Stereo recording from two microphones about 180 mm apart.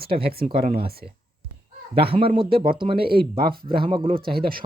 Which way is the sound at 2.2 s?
30° right (ahead or behind).